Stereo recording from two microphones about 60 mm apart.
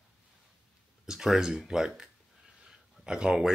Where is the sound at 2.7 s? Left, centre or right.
Centre.